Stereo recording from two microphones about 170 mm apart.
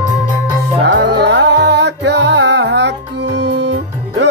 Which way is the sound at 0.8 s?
85° right.